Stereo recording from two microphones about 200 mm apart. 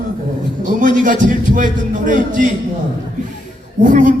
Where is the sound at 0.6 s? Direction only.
40° right (ahead or behind).